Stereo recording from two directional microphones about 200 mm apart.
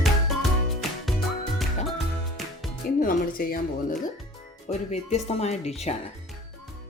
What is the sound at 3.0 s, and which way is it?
Music, 45° left (ahead or behind).